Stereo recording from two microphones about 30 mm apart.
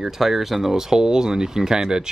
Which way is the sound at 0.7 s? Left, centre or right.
Centre.